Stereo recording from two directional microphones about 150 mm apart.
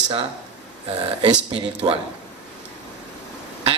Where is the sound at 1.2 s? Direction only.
40° right (ahead or behind).